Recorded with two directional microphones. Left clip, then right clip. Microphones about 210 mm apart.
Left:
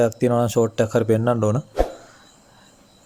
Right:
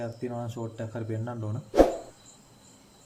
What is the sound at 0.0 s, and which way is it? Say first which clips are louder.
Speech: left 16 dB; 55° left (ahead or behind).